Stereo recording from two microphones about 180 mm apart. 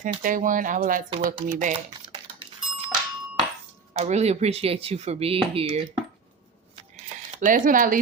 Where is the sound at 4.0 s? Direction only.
35° right (ahead or behind).